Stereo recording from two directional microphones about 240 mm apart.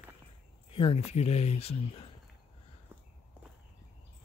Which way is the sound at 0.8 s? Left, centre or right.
Left.